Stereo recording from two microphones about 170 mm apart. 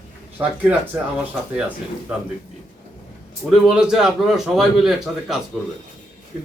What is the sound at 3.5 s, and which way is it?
A man's voice, 5° right (ahead or behind).